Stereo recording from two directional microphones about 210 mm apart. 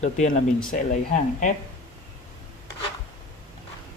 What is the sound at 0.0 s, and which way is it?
Speech, 35° left (ahead or behind).